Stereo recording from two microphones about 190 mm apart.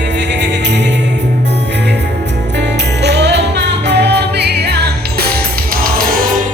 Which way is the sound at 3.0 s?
65° right (ahead or behind).